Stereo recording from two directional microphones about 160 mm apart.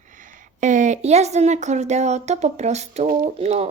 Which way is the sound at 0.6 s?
50° right (ahead or behind).